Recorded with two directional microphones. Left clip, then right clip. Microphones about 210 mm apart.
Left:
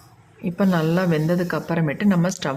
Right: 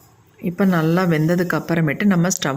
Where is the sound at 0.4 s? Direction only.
10° right (ahead or behind).